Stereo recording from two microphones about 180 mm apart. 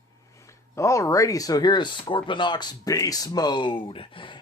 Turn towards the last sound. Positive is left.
turn(degrees=30)  # may be behind; listen again after turning